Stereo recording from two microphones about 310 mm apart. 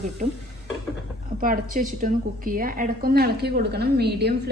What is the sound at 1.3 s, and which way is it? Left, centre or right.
A woman's voice, right.